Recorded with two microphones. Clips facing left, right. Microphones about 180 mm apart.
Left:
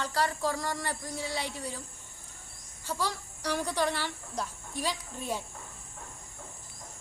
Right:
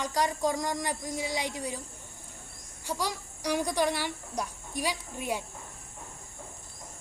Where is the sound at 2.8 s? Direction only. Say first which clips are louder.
Right 1 dB; 15° right (ahead or behind).